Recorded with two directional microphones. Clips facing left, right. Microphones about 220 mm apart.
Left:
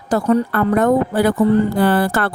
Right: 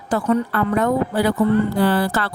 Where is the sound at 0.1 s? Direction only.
40° left (ahead or behind).